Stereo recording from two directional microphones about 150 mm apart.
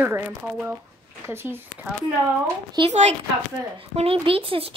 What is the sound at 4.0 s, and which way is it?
Speech, 40° right (ahead or behind).